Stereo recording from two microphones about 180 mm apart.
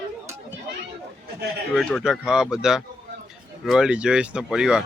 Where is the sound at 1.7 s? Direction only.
Centre (ahead or behind).